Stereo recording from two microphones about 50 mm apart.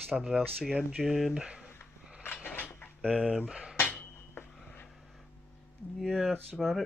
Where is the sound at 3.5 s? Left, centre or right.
Centre.